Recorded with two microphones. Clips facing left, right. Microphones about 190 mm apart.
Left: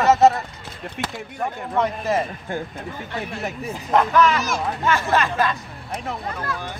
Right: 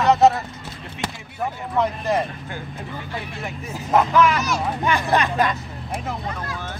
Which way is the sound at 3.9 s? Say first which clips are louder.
Even; 5° right (ahead or behind).